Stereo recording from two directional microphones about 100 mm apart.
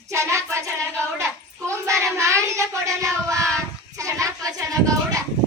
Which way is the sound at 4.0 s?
30° right (ahead or behind).